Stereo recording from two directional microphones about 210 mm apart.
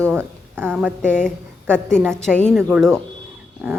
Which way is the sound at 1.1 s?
5° left (ahead or behind).